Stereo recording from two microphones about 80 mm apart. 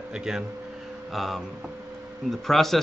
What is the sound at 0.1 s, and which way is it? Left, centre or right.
Speech, centre.